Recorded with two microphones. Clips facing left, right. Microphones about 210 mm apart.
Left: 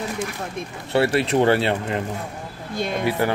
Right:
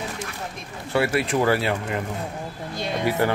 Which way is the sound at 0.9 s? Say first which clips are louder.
Left 3 dB; 30° left (ahead or behind).